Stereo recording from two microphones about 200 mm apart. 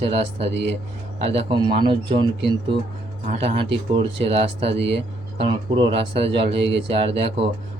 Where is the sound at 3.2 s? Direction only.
35° right (ahead or behind).